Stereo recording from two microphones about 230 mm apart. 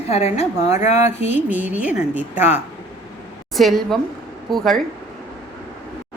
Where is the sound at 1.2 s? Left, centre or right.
Left.